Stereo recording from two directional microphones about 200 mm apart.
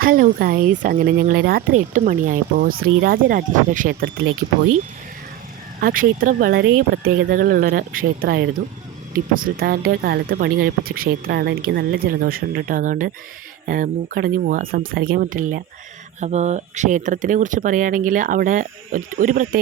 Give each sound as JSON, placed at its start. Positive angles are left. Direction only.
{"t": 0.0, "sound": "speech", "side_deg": -45}
{"t": 5.8, "sound": "speech", "side_deg": -45}